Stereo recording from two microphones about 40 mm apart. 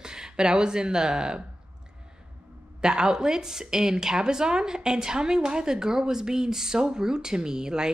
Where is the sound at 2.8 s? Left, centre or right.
Centre.